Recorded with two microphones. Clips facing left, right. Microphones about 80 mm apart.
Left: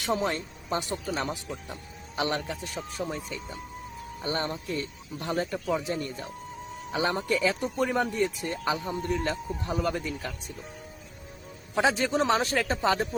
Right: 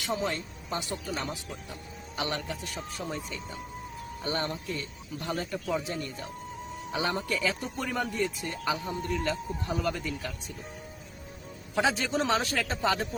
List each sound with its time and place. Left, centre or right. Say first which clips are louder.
0.0 s speech: left 3 dB; left
4.2 s speech: left 2 dB; left
11.7 s speech: left 3 dB; left